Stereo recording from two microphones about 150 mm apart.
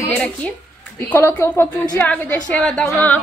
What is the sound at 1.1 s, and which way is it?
A woman's voice, 15° left (ahead or behind).